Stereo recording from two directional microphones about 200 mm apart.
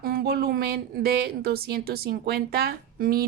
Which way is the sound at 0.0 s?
50° right (ahead or behind).